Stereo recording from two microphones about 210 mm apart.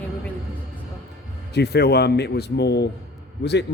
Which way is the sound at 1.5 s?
50° left (ahead or behind).